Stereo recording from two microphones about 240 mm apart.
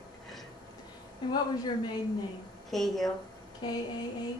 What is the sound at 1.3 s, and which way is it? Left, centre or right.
Speech, centre.